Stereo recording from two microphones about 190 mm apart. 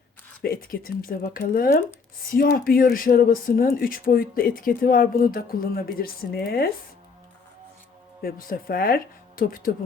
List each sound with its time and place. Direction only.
0.4 s speech: 50° left (ahead or behind)
8.2 s speech: 50° left (ahead or behind)